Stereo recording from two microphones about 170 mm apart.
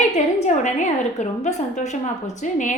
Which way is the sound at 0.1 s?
45° left (ahead or behind).